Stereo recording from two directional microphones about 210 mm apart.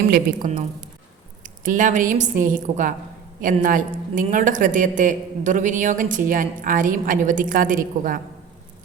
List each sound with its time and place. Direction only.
0.1 s a woman's voice: 40° right (ahead or behind)